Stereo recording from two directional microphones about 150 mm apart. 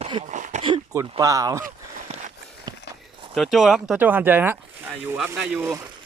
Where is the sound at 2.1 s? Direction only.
40° right (ahead or behind).